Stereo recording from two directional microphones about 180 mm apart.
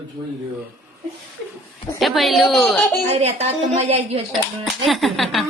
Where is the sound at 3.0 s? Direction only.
35° right (ahead or behind).